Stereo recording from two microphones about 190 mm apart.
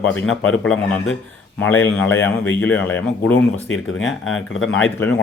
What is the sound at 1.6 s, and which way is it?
Speech, 10° left (ahead or behind).